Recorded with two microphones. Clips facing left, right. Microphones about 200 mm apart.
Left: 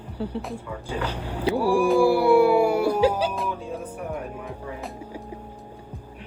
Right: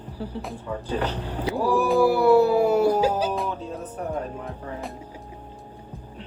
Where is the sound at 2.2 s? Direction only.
10° left (ahead or behind).